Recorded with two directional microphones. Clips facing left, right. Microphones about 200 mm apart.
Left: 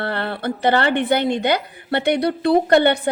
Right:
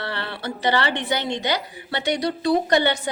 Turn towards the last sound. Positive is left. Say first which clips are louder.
# left 5 dB
turn(degrees=55)  # may be behind; listen again after turning